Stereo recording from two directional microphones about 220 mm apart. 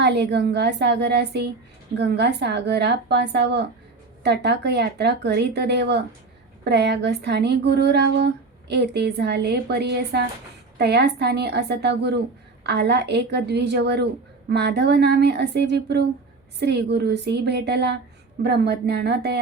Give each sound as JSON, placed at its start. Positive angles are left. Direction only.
{"t": 0.0, "sound": "speech", "side_deg": -50}